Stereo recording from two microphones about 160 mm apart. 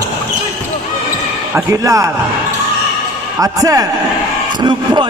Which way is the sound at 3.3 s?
20° right (ahead or behind).